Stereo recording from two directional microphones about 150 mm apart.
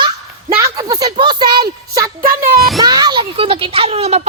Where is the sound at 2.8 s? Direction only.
25° right (ahead or behind); by 4.2 s 40° right (ahead or behind).